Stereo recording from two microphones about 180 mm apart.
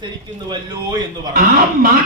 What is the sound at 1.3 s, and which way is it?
Speech, 55° right (ahead or behind).